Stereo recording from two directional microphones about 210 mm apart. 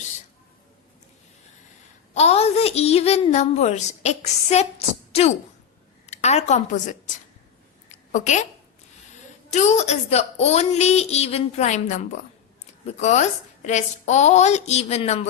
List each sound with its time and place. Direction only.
2.1 s a woman's voice: 30° left (ahead or behind)
6.1 s a woman's voice: 30° left (ahead or behind)
7.9 s a sound: 35° left (ahead or behind)
9.5 s a woman's voice: 35° left (ahead or behind)